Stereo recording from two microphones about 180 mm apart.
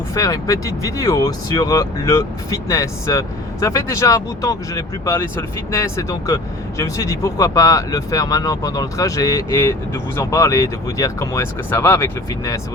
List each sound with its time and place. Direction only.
0.1 s speech: 20° left (ahead or behind)